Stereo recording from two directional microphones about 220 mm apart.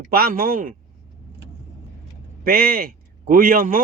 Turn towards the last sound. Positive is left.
turn(degrees=-40)  # may be behind; listen again after turning